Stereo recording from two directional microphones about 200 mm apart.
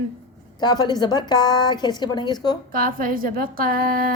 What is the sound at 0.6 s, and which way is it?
A woman's voice, 20° left (ahead or behind).